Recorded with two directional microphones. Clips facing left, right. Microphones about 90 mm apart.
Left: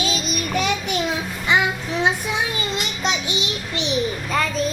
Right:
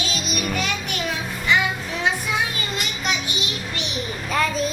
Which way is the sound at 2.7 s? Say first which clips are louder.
Left 1 dB; 25° left (ahead or behind).